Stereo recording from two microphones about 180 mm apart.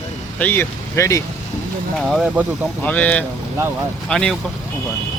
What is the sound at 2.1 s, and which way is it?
Speech, 5° right (ahead or behind).